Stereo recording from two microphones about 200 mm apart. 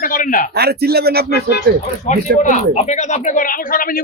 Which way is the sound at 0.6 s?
50° right (ahead or behind).